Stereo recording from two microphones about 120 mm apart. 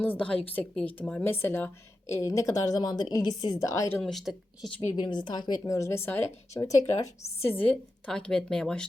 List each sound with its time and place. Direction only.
0.0 s a woman's voice: 10° left (ahead or behind); by 3.9 s 25° left (ahead or behind)
4.0 s speech: centre (ahead or behind)
4.9 s speech: 40° left (ahead or behind); by 6.6 s 20° left (ahead or behind)
6.6 s a woman's voice: 30° left (ahead or behind); by 8.9 s 5° left (ahead or behind)